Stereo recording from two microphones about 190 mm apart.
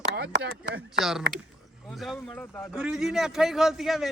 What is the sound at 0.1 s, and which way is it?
Speech, 60° right (ahead or behind).